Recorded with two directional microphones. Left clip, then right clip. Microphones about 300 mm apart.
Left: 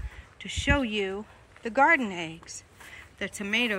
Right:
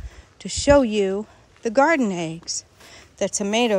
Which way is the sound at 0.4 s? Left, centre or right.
Centre.